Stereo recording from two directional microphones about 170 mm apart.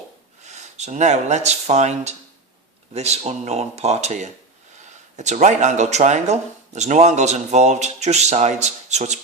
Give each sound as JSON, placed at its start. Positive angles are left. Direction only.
{"t": 0.4, "sound": "speech", "side_deg": -45}